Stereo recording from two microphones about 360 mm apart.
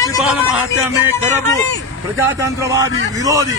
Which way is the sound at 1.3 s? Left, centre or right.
Centre.